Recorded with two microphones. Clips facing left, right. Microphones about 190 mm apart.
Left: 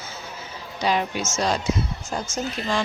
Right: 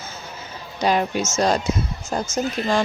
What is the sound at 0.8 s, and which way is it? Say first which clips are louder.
A woman's voice: right 3 dB; 45° right (ahead or behind).